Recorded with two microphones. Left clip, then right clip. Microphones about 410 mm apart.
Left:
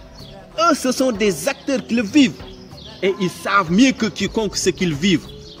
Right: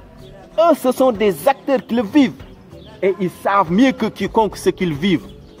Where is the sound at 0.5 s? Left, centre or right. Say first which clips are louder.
Right 3 dB; centre.